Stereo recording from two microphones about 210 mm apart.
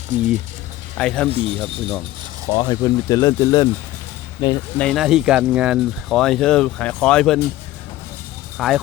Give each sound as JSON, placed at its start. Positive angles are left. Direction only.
{"t": 0.9, "sound": "speech", "side_deg": 5}
{"t": 1.3, "sound": "speech", "side_deg": -25}
{"t": 1.5, "sound": "speech", "side_deg": 5}
{"t": 2.6, "sound": "speech", "side_deg": 15}
{"t": 4.8, "sound": "speech", "side_deg": 0}
{"t": 8.5, "sound": "speech", "side_deg": 0}